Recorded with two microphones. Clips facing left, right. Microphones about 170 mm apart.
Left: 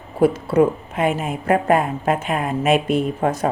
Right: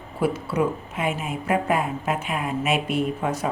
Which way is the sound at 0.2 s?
50° left (ahead or behind).